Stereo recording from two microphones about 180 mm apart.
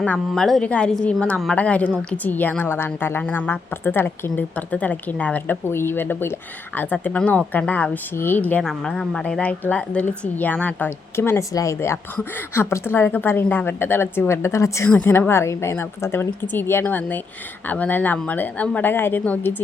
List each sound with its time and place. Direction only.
0.0 s a woman's voice: 5° left (ahead or behind)